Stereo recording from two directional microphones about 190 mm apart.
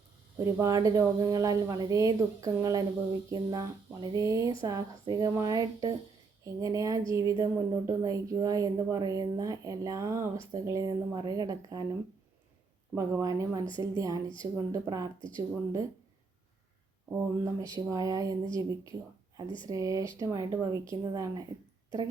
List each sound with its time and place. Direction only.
0.3 s speech: 15° right (ahead or behind)
13.0 s speech: 15° right (ahead or behind)
17.1 s speech: 15° right (ahead or behind)